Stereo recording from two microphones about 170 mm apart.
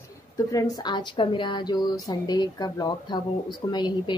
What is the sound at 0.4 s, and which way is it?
A woman's voice, 20° left (ahead or behind).